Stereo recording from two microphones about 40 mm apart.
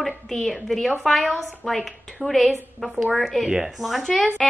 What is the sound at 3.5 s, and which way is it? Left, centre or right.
Speech, centre.